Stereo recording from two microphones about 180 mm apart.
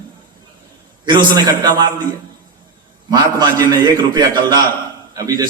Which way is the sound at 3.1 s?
20° right (ahead or behind).